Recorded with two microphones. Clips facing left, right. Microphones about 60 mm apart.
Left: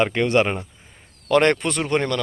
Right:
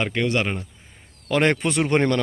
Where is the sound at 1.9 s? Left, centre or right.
Right.